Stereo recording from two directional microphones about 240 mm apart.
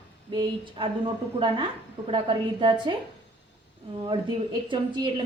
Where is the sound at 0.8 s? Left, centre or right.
Centre.